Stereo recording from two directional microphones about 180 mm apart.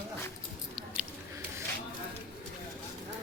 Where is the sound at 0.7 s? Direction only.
5° right (ahead or behind).